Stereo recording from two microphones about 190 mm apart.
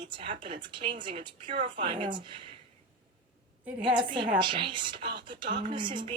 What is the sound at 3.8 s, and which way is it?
A woman's voice, 25° right (ahead or behind).